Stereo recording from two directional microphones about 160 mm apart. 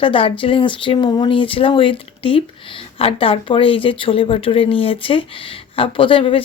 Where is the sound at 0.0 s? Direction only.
35° left (ahead or behind).